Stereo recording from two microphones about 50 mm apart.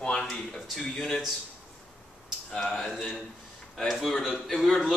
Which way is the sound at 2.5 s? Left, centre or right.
Centre.